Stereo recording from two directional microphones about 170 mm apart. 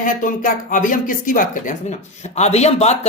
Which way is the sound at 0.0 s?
50° left (ahead or behind).